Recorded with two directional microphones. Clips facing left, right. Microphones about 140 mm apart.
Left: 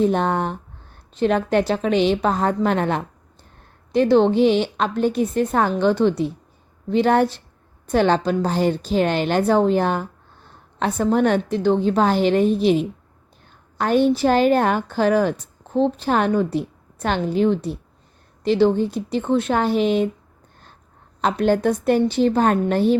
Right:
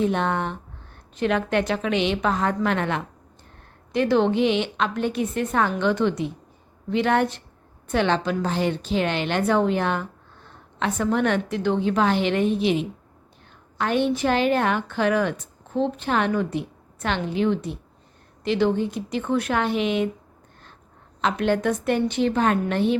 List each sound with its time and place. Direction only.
0.0 s a woman's voice: 40° left (ahead or behind)
21.2 s a woman's voice: 40° left (ahead or behind)